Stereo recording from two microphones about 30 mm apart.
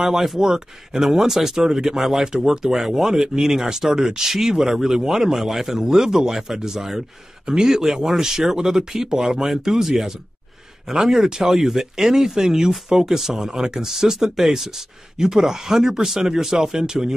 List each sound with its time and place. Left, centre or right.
0.4 s speech: centre
2.0 s speech: centre
2.2 s speech: right
2.7 s speech: centre
11.5 s speech: centre